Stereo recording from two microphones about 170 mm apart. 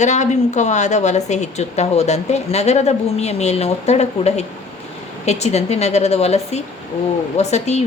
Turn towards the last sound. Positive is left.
turn(degrees=40)  # may be behind; listen again after turning